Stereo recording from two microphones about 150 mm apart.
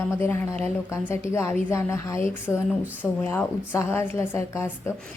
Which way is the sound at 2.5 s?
5° left (ahead or behind).